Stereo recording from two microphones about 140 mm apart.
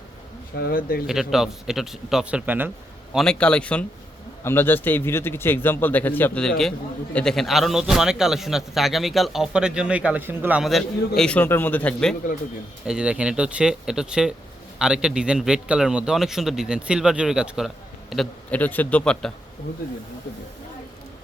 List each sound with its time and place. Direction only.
0.7 s speech: 90° left
1.0 s a man's voice: 5° right (ahead or behind)
3.2 s a man's voice: 5° left (ahead or behind); by 10.6 s 15° right (ahead or behind)
10.6 s a man's voice: centre (ahead or behind)
12.8 s a man's voice: 5° right (ahead or behind)
18.5 s a man's voice: 10° left (ahead or behind)